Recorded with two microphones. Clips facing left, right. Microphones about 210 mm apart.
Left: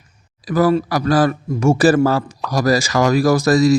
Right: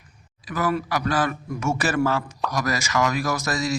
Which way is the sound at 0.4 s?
35° left (ahead or behind).